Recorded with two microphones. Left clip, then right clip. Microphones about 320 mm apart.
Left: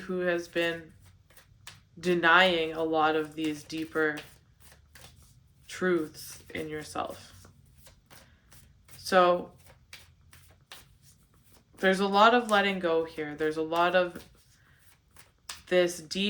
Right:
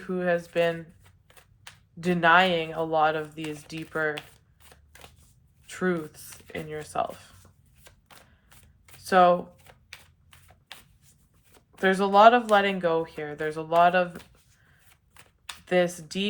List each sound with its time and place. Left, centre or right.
0.0 s speech: right
2.0 s speech: right
5.6 s speech: right
9.0 s speech: right
11.8 s speech: right
15.4 s speech: right